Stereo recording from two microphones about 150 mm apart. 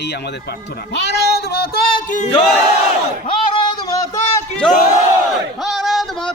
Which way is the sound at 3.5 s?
30° left (ahead or behind).